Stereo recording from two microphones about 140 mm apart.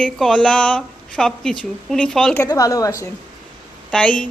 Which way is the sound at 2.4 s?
25° left (ahead or behind).